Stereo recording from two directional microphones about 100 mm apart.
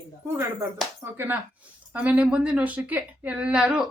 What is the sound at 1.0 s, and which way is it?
A woman's voice, 20° right (ahead or behind).